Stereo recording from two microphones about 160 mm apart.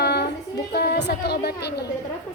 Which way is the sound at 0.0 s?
90° left.